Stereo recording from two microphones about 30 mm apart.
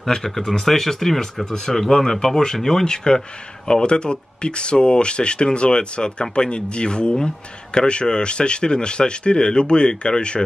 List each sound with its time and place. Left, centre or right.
0.0 s a man's voice: centre